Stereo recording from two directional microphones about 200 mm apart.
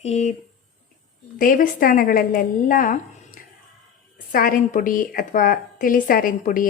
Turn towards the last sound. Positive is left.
turn(degrees=45)  # may be behind; listen again after turning